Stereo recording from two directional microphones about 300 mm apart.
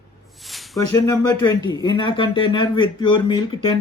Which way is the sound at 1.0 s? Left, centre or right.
Centre.